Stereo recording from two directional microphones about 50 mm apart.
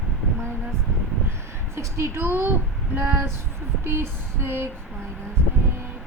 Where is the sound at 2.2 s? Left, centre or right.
Right.